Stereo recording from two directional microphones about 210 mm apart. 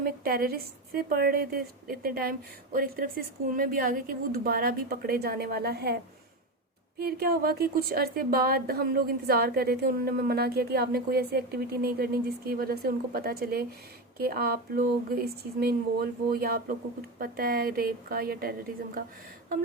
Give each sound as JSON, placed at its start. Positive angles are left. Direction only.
{"t": 0.0, "sound": "a woman's voice", "side_deg": -45}
{"t": 7.0, "sound": "a woman's voice", "side_deg": -45}